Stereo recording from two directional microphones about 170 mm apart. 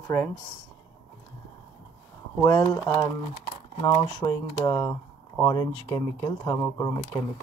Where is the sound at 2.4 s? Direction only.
15° left (ahead or behind).